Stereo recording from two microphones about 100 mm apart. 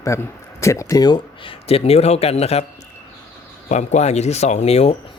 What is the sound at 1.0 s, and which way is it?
Speech, 55° left (ahead or behind).